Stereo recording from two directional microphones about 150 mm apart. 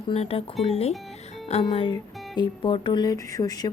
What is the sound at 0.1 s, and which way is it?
A woman's voice, 40° left (ahead or behind).